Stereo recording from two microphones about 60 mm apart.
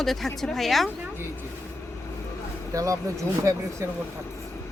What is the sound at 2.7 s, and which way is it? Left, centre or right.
Speech, right.